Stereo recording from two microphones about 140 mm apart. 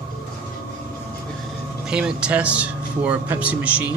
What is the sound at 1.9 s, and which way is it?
A man's voice, 5° right (ahead or behind).